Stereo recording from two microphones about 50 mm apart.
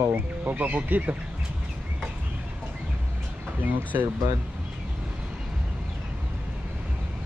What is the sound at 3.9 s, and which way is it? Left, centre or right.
Speech, right.